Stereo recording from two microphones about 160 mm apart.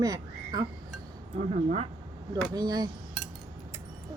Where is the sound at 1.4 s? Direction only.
40° right (ahead or behind).